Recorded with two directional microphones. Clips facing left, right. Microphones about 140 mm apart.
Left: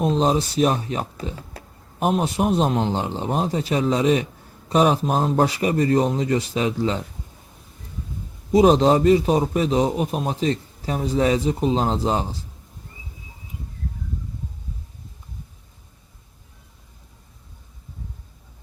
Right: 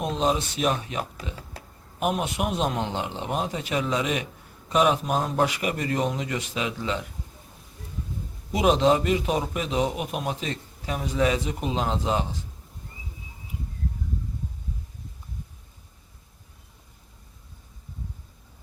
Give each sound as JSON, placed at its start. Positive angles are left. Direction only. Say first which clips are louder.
{"t": 0.0, "sound": "a man's voice", "louder": "left 5 dB", "side_deg": 35}
{"t": 8.5, "sound": "a man's voice", "louder": "left 5 dB", "side_deg": 35}